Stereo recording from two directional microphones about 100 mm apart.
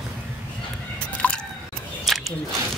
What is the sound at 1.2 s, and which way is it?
Biting, 15° left (ahead or behind).